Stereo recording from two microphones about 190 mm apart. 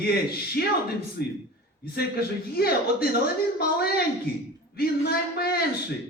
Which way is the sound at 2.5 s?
55° left (ahead or behind).